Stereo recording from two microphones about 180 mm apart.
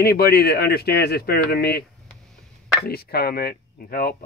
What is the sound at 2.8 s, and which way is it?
Speech, 60° left (ahead or behind).